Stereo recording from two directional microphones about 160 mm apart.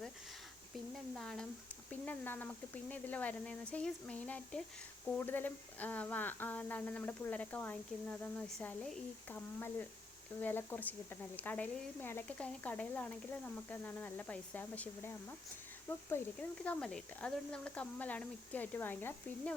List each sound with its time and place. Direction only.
1.1 s speech: 5° left (ahead or behind)